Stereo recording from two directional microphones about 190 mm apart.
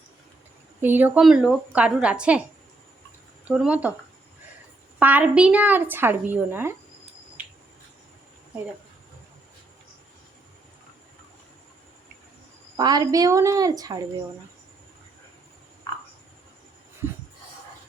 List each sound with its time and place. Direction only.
0.8 s a woman's voice: 10° right (ahead or behind)
3.4 s a woman's voice: 5° right (ahead or behind)
4.9 s a woman's voice: 10° right (ahead or behind)
12.7 s speech: 20° right (ahead or behind)